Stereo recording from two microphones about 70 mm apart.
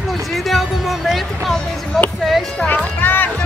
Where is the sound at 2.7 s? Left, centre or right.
Left.